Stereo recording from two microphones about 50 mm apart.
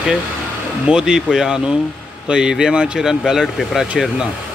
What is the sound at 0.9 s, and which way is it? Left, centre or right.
Speech, centre.